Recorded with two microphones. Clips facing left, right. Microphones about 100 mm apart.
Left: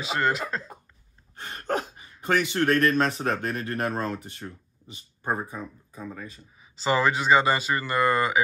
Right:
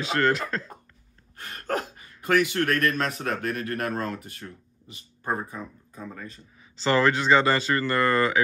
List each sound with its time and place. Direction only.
0.0 s speech: 5° left (ahead or behind)
1.3 s speech: 25° left (ahead or behind)